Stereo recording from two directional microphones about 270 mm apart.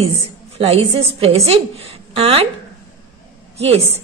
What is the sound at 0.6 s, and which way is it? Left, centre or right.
A woman's voice, right.